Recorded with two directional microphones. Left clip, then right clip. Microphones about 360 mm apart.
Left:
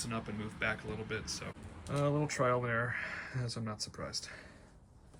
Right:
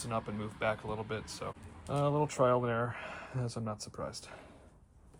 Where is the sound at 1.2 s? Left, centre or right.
Right.